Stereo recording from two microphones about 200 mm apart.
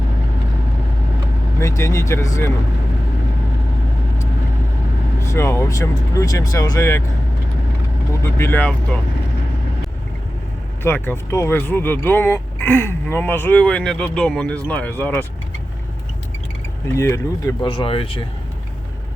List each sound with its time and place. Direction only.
1.5 s speech: 15° left (ahead or behind)
5.2 s speech: 15° left (ahead or behind)
8.2 s speech: 10° left (ahead or behind)
10.8 s speech: 10° left (ahead or behind)
16.9 s speech: 15° left (ahead or behind)
17.7 s speech: 25° left (ahead or behind)